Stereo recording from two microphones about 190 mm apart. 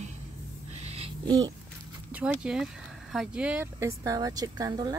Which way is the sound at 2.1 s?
5° right (ahead or behind).